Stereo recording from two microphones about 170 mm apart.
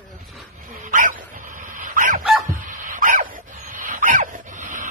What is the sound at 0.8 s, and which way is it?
Dog, 50° right (ahead or behind).